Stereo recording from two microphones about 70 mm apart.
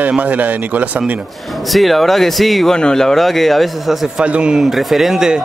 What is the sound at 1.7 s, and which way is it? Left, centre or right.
Speech, centre.